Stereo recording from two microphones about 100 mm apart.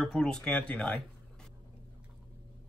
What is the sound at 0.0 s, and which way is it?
A man's voice, 5° left (ahead or behind).